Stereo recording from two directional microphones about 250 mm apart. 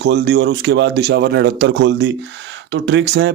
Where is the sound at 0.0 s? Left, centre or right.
Right.